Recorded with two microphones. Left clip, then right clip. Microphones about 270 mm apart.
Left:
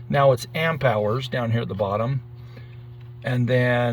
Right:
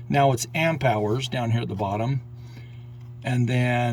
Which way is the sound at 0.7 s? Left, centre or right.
Right.